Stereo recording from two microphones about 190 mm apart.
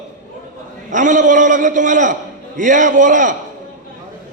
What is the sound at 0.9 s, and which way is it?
A man's voice, 40° right (ahead or behind).